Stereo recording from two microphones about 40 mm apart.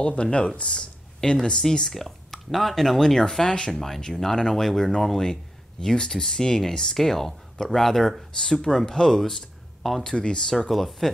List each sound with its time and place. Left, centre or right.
0.0 s speech: left
3.7 s speech: centre
10.0 s speech: left
10.7 s speech: centre